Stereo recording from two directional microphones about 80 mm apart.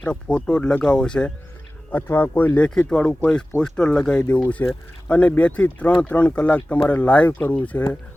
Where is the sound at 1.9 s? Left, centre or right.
Left.